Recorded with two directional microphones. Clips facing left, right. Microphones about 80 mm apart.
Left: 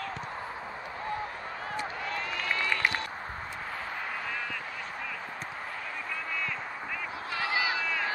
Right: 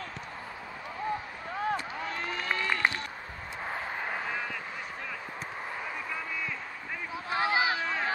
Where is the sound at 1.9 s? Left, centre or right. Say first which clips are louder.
Even; right.